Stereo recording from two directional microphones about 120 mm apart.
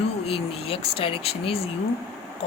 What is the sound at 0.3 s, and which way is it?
Speech, 50° left (ahead or behind).